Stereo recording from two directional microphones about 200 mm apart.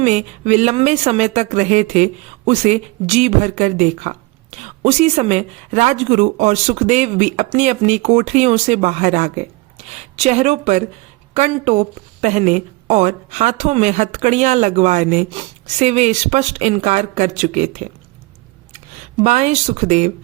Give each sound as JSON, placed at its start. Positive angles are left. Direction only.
{"t": 0.0, "sound": "a woman's voice", "side_deg": -35}